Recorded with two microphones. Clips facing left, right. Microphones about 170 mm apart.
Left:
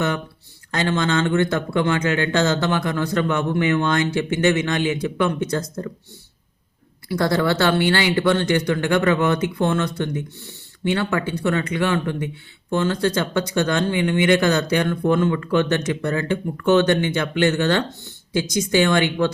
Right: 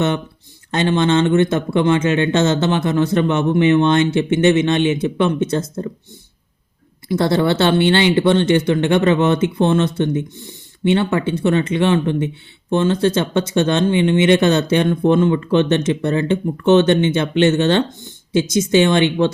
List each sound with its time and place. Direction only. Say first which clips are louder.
0.7 s speech: right 5 dB; 20° right (ahead or behind)
7.1 s speech: right 4 dB; 25° right (ahead or behind)